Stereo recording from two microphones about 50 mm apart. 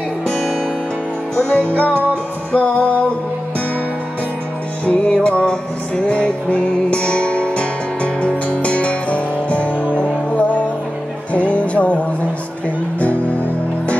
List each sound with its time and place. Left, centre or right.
0.3 s music: centre; by 3.1 s left
4.8 s music: left